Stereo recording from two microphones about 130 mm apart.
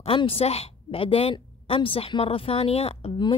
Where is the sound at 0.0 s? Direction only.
45° left (ahead or behind).